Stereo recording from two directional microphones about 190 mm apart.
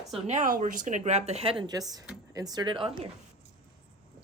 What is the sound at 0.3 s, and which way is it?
A woman's voice, 40° right (ahead or behind).